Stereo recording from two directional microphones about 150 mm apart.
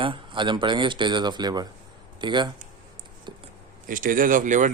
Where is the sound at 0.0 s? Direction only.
35° right (ahead or behind).